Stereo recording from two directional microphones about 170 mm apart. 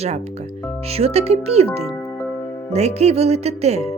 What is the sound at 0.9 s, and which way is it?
Speech, 35° right (ahead or behind).